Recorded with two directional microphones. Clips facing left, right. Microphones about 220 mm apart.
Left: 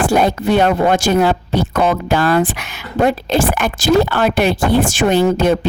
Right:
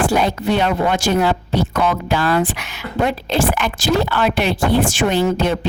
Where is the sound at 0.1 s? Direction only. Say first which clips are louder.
Left 3 dB; 50° left (ahead or behind).